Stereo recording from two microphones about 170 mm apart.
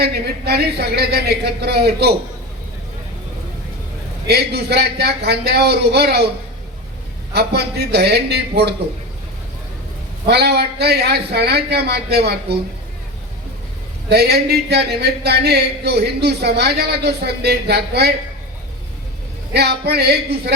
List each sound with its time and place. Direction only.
0.0 s a man's voice: 70° right (ahead or behind)
4.3 s a man's voice: 70° right (ahead or behind)
7.3 s a man's voice: 75° right (ahead or behind)
10.2 s a man's voice: 75° right (ahead or behind)
14.1 s a man's voice: 70° right (ahead or behind)
19.5 s a man's voice: 70° right (ahead or behind)